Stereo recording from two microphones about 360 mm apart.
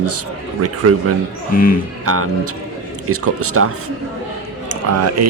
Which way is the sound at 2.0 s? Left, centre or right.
Right.